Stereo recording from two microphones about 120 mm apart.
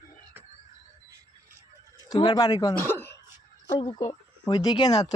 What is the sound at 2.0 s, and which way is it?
Speech, 35° left (ahead or behind).